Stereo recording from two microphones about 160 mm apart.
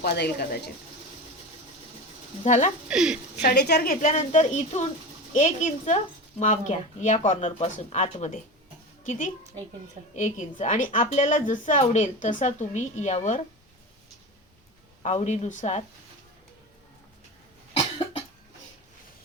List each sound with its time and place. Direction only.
0.0 s speech: 85° left
2.4 s a woman's voice: 50° left (ahead or behind)
2.9 s speech: 5° right (ahead or behind)
3.4 s speech: 90° left
4.0 s a woman's voice: 45° left (ahead or behind)
15.0 s a woman's voice: 45° left (ahead or behind)